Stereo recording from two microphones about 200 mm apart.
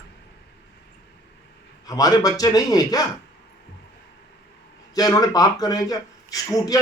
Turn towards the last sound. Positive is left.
turn(degrees=20)  # may be behind; listen again after turning